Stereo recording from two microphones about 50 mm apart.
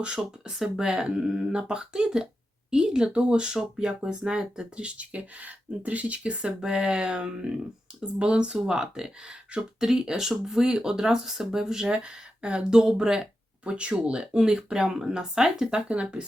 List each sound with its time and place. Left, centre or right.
0.0 s speech: centre
15.9 s speech: right